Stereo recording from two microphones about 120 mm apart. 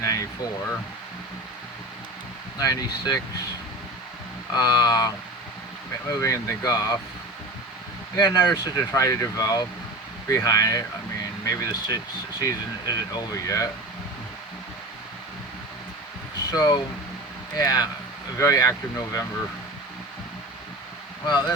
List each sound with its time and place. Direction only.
0.0 s air conditioning: 30° left (ahead or behind)
2.6 s speech: 30° left (ahead or behind)
4.5 s speech: 35° left (ahead or behind)
8.1 s speech: 35° left (ahead or behind)
16.5 s speech: 30° left (ahead or behind)
21.2 s speech: 40° left (ahead or behind)